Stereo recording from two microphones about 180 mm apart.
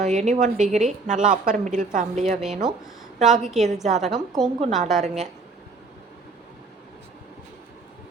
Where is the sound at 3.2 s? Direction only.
40° right (ahead or behind).